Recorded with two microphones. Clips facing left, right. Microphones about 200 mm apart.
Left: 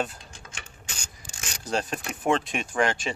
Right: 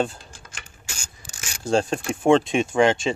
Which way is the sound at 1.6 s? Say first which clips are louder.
Right 8 dB; 25° right (ahead or behind).